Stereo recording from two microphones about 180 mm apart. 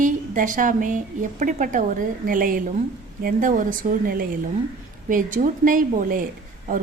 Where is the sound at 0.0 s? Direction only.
45° right (ahead or behind).